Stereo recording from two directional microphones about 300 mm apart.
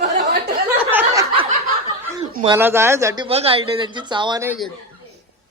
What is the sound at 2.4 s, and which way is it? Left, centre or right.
Speech, centre.